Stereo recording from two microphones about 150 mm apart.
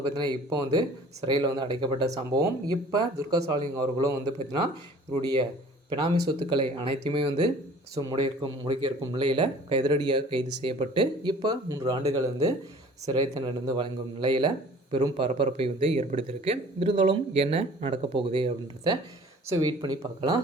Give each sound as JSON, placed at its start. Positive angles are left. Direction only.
{"t": 0.1, "sound": "a man's voice", "side_deg": -30}
{"t": 19.5, "sound": "speech", "side_deg": -25}